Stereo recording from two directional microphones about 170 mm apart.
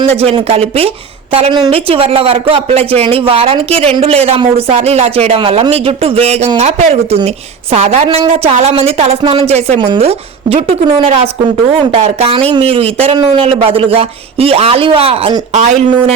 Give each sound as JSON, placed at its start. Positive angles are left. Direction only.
{"t": 0.0, "sound": "speech", "side_deg": -35}